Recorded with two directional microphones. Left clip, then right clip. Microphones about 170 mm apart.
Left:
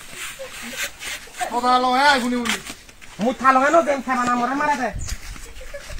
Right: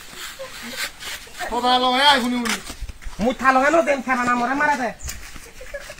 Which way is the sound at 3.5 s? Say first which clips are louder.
Left 1 dB; 20° right (ahead or behind).